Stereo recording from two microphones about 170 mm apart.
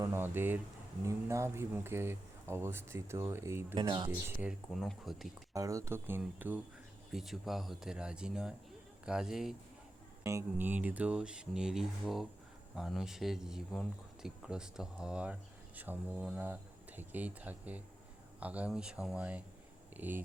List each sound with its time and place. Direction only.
0.0 s speech: 15° right (ahead or behind)
3.8 s speech: 25° right (ahead or behind)
4.1 s speech: 10° right (ahead or behind)
4.7 s speech: centre (ahead or behind)
5.5 s speech: 20° right (ahead or behind); by 9.6 s centre (ahead or behind)
10.2 s speech: 15° right (ahead or behind)